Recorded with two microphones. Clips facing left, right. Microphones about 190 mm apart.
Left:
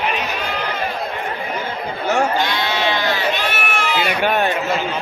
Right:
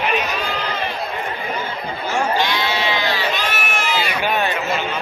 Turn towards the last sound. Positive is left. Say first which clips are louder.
# left 3 dB
turn(degrees=55)  # may be behind; listen again after turning